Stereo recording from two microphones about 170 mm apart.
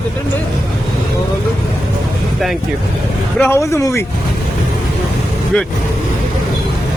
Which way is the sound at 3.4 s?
15° left (ahead or behind).